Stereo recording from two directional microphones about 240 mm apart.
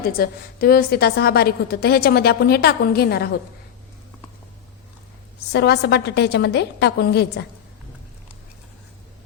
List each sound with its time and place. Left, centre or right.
0.0 s a woman's voice: left
5.5 s a woman's voice: left